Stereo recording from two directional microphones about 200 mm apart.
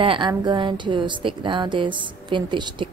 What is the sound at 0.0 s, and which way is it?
Speech, 25° right (ahead or behind).